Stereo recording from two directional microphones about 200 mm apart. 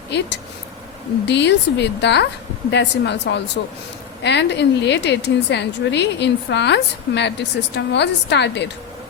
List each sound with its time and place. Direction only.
0.1 s a woman's voice: 60° left (ahead or behind)